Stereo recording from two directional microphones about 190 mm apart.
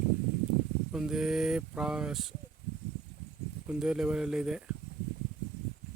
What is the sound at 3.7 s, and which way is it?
Speech, 5° right (ahead or behind).